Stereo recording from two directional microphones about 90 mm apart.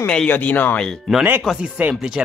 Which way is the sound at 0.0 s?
10° left (ahead or behind).